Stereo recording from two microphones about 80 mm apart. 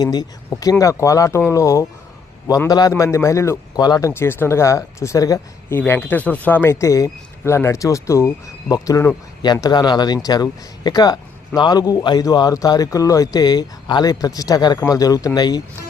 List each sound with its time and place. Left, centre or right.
0.0 s speech: left
2.6 s speech: left
2.9 s speech: left
3.8 s speech: left
4.0 s speech: left
5.7 s speech: left
9.4 s speech: left
15.4 s speech: left